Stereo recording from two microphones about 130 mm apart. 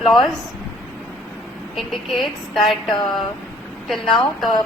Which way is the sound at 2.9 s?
35° left (ahead or behind).